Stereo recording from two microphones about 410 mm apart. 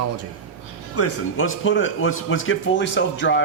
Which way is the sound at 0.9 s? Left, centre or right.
Left.